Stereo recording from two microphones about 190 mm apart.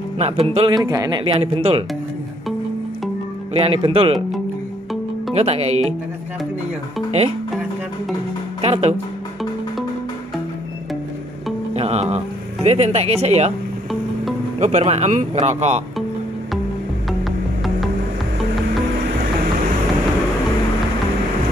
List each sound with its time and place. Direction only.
0.2 s speech: 30° right (ahead or behind)
3.5 s speech: 30° right (ahead or behind)
5.3 s speech: 35° right (ahead or behind)
8.5 s music: 35° right (ahead or behind)
11.7 s music: 35° right (ahead or behind)
12.6 s speech: 35° right (ahead or behind)
14.6 s speech: 35° right (ahead or behind)